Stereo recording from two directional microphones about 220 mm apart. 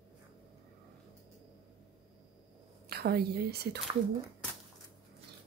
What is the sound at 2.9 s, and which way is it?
Speech, 45° right (ahead or behind).